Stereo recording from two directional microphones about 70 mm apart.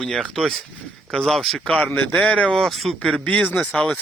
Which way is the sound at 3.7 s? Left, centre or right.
Centre.